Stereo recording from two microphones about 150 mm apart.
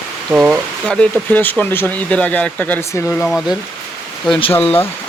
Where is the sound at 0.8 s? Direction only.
5° left (ahead or behind).